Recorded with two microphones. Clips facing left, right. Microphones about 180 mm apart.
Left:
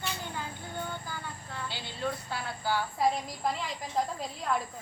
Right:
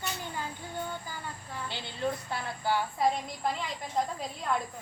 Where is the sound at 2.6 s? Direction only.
20° right (ahead or behind).